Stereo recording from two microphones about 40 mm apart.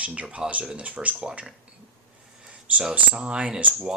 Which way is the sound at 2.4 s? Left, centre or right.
Right.